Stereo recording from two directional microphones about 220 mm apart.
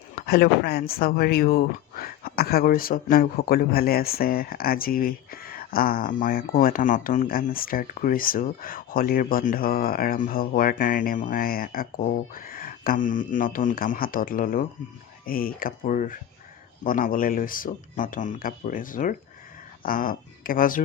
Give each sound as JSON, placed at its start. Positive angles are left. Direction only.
{"t": 0.2, "sound": "speech", "side_deg": 45}